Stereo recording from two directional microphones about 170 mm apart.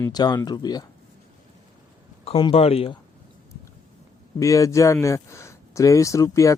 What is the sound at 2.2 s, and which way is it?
Speech, 35° left (ahead or behind).